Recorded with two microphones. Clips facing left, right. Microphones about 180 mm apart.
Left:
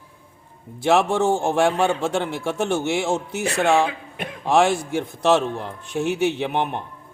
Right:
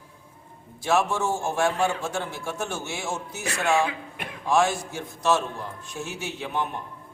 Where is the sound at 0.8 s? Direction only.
65° left (ahead or behind).